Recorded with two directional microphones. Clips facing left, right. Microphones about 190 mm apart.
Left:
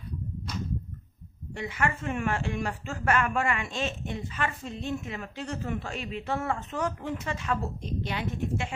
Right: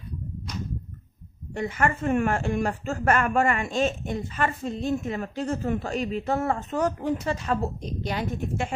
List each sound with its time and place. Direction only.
1.5 s a woman's voice: 45° right (ahead or behind)